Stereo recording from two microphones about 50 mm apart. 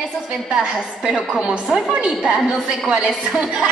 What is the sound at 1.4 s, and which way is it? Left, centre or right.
A woman's voice, centre.